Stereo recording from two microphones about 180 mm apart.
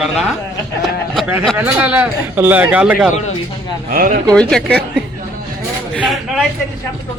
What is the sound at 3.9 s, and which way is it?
Speech, 50° right (ahead or behind).